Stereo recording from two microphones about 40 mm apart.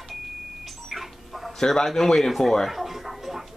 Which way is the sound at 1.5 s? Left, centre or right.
Centre.